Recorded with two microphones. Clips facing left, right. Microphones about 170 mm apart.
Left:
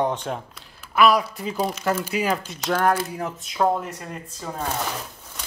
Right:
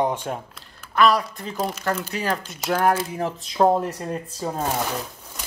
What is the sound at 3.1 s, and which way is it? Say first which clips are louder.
Speech: right 3 dB; 30° right (ahead or behind).